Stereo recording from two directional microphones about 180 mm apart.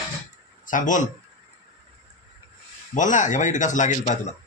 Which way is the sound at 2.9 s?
45° left (ahead or behind).